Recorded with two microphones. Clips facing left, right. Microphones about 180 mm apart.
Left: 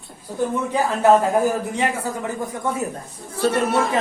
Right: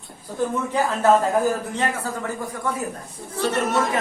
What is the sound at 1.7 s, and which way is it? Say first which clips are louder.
Speech: left 2 dB; 15° left (ahead or behind).